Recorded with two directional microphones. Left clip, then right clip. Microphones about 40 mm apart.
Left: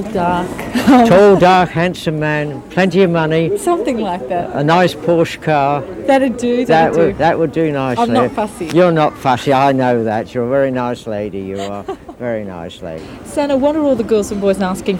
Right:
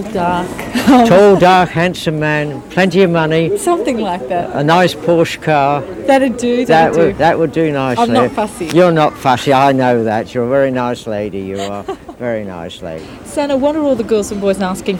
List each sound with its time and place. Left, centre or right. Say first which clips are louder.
0.1 s speech: right 1 dB; right